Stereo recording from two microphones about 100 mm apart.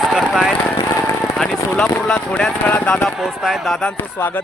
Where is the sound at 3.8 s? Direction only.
20° left (ahead or behind).